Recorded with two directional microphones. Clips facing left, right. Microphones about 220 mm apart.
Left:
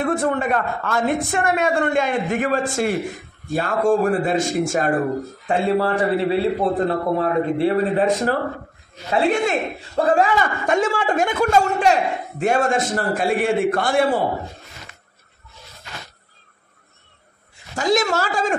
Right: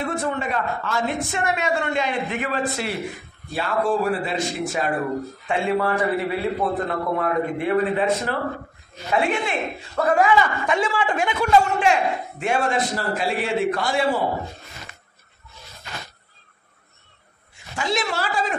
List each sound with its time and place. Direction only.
0.0 s a man's voice: 50° left (ahead or behind)
5.5 s a man's voice: 35° left (ahead or behind)
9.1 s a man's voice: 40° left (ahead or behind)
9.9 s speech: 30° left (ahead or behind)
10.3 s a man's voice: 45° left (ahead or behind)
17.7 s a man's voice: 45° left (ahead or behind)